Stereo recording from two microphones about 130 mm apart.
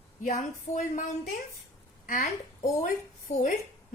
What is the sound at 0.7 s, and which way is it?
Speech, 25° left (ahead or behind).